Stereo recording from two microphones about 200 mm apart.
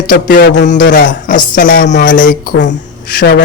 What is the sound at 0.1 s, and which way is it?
Speech, 55° left (ahead or behind).